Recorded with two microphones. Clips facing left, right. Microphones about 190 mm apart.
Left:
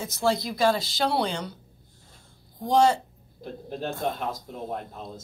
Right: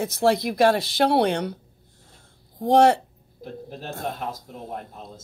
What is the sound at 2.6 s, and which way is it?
Speech, 65° right (ahead or behind).